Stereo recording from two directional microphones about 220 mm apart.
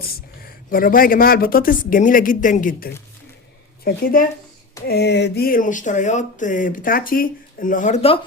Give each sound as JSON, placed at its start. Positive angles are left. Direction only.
{"t": 0.0, "sound": "speech", "side_deg": 40}